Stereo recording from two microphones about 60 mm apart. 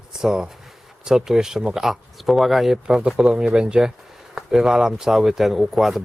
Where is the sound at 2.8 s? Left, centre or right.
Centre.